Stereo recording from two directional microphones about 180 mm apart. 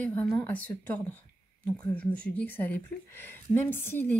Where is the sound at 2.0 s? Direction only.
5° left (ahead or behind).